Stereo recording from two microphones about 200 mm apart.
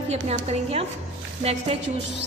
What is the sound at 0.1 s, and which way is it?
Speech, 30° right (ahead or behind).